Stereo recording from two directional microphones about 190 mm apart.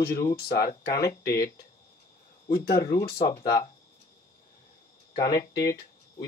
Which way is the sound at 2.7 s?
15° left (ahead or behind).